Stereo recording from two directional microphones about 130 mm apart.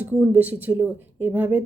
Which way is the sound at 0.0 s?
15° right (ahead or behind).